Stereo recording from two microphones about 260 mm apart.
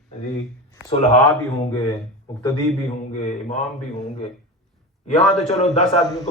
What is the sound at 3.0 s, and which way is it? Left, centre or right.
Speech, left.